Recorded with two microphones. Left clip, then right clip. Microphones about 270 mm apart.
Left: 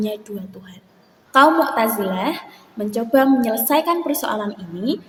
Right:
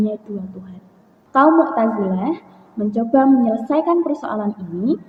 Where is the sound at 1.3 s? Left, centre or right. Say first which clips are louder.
Even; left.